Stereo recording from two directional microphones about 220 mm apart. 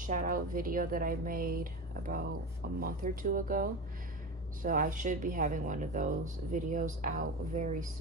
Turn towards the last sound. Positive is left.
turn(degrees=-35)  # may be behind; listen again after turning